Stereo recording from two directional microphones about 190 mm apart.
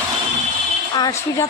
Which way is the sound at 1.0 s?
15° left (ahead or behind).